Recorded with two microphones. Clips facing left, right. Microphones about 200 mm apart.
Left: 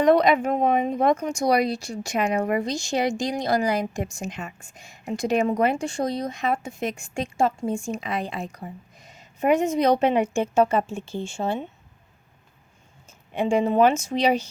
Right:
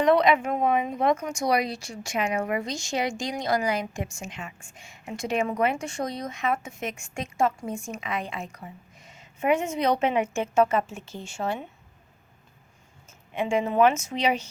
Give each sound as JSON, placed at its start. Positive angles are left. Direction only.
{"t": 0.0, "sound": "speech", "side_deg": 40}
{"t": 13.1, "sound": "speech", "side_deg": 35}